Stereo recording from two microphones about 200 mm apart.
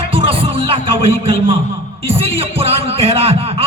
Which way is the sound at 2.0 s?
30° right (ahead or behind).